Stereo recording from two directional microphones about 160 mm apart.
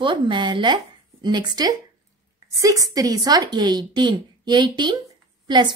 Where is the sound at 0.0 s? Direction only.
30° right (ahead or behind).